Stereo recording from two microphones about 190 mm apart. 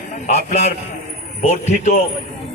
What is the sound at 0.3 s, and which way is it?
A man's voice, 35° left (ahead or behind).